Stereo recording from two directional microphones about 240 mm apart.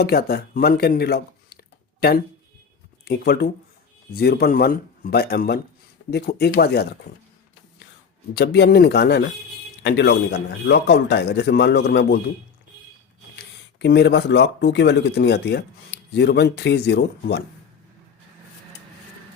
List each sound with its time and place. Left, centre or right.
0.0 s speech: left
8.4 s speech: left
13.7 s speech: left